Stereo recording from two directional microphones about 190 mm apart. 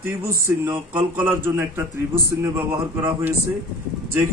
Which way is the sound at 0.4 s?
10° right (ahead or behind).